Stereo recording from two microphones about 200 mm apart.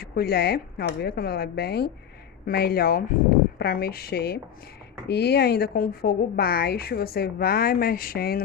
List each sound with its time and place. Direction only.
0.0 s speech: 50° left (ahead or behind)